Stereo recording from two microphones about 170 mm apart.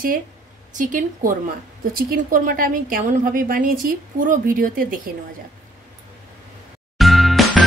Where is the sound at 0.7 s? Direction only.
50° right (ahead or behind).